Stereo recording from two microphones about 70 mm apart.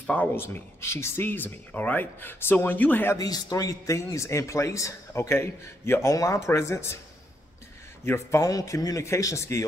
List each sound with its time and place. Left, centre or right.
0.0 s a man's voice: left
0.4 s speech: left
3.2 s a man's voice: left
8.0 s speech: left
8.5 s a man's voice: left